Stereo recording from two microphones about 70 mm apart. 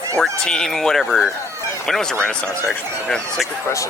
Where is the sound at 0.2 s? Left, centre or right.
Centre.